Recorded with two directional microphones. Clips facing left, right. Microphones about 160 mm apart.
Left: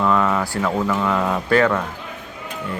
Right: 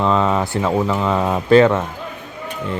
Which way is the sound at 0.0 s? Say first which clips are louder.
Right 2 dB; 20° right (ahead or behind).